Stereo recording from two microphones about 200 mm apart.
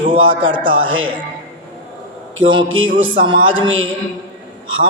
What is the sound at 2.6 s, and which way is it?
Speech, 75° right (ahead or behind).